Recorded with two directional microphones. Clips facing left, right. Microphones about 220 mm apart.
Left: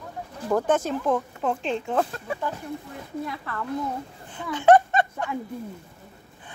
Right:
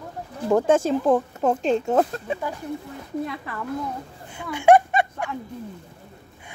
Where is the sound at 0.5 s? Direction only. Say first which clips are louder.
Right 4 dB; 25° right (ahead or behind).